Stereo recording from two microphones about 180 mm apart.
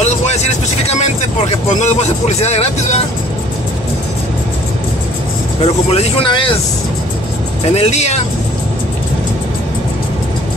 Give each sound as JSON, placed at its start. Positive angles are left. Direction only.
{"t": 0.0, "sound": "vehicle", "side_deg": 40}
{"t": 5.6, "sound": "speech", "side_deg": 35}
{"t": 7.7, "sound": "speech", "side_deg": 35}